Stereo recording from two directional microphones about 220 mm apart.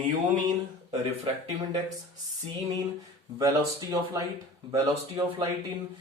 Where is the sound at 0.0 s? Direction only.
25° right (ahead or behind).